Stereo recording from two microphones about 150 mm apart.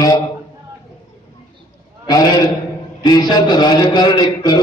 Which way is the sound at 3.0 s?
30° left (ahead or behind).